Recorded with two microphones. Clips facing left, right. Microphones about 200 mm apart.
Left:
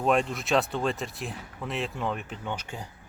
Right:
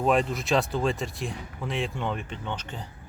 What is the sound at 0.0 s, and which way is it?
Speech, centre (ahead or behind).